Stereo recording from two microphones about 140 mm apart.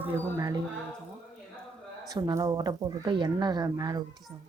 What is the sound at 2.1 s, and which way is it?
Speech, 25° right (ahead or behind).